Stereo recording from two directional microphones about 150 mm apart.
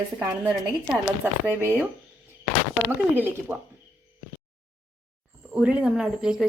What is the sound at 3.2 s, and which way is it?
Speech, 10° right (ahead or behind).